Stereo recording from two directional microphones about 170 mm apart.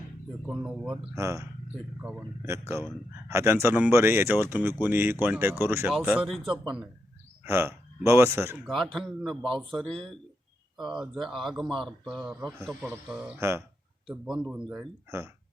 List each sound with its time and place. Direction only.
0.4 s speech: 5° right (ahead or behind)
1.1 s speech: 20° right (ahead or behind); by 6.6 s centre (ahead or behind)
7.4 s speech: 15° right (ahead or behind)
8.6 s speech: centre (ahead or behind)